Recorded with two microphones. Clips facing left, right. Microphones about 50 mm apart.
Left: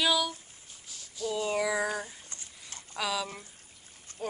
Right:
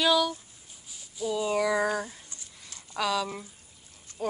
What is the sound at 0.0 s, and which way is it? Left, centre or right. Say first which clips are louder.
Speech: right 4 dB; centre.